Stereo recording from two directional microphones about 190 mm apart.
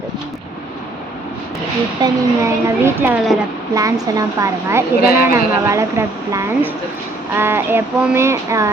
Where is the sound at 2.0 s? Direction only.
15° right (ahead or behind).